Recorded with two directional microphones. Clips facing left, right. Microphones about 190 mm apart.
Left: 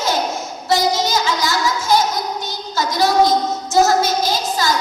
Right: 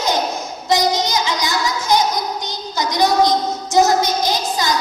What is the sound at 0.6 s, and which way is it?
Child singing, 15° right (ahead or behind).